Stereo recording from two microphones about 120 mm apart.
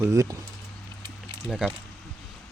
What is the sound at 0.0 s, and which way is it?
Speech, 25° right (ahead or behind).